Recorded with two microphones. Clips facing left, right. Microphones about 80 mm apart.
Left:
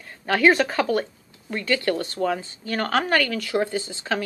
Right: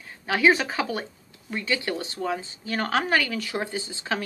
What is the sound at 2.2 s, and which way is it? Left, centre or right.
Speech, left.